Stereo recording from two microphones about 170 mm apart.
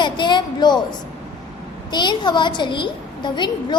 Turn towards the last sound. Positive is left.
turn(degrees=25)  # may be behind; listen again after turning